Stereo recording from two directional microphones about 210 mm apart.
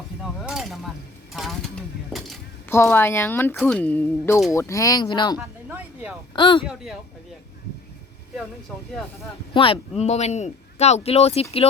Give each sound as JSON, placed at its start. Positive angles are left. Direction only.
{"t": 0.2, "sound": "a sound", "side_deg": 0}
{"t": 1.3, "sound": "speech", "side_deg": 0}
{"t": 2.6, "sound": "speech", "side_deg": 10}
{"t": 5.4, "sound": "a sound", "side_deg": -10}
{"t": 6.3, "sound": "speech", "side_deg": 25}
{"t": 9.5, "sound": "speech", "side_deg": 25}